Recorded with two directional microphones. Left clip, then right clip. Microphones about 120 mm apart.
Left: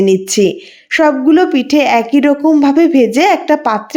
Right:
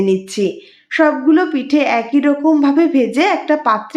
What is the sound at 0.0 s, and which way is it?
A woman's voice, 50° left (ahead or behind).